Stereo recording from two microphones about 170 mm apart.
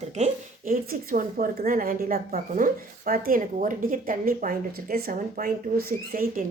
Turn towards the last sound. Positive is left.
turn(degrees=-55)  # may be behind; listen again after turning